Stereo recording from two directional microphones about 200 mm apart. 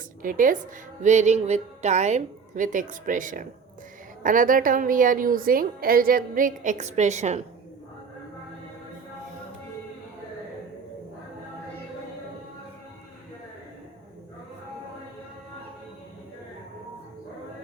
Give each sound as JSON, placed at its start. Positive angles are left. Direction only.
{"t": 0.2, "sound": "a woman's voice", "side_deg": -45}